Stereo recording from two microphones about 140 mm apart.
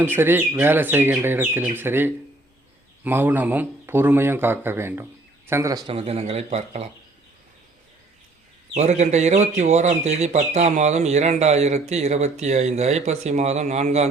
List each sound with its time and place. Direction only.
0.0 s a man's voice: 15° right (ahead or behind)
5.9 s speech: 50° right (ahead or behind)
8.7 s speech: 55° right (ahead or behind)